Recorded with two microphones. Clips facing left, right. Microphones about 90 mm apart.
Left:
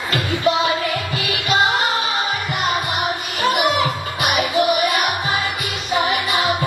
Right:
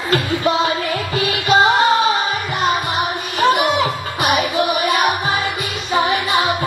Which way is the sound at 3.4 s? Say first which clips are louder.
Right 3 dB; 35° right (ahead or behind).